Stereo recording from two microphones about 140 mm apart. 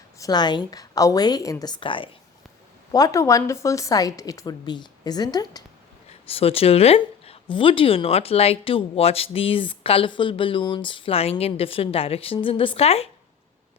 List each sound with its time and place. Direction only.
0.2 s a woman's voice: 30° left (ahead or behind)
2.9 s a woman's voice: 25° left (ahead or behind)
6.2 s a woman's voice: 40° left (ahead or behind)